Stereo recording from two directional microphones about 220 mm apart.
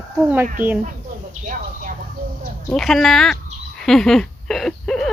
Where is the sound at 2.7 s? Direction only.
Centre (ahead or behind).